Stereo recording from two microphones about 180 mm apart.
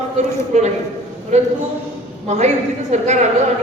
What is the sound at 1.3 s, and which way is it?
A man's voice, 40° right (ahead or behind).